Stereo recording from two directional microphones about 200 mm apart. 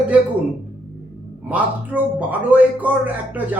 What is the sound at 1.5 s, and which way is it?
Speech, 10° right (ahead or behind).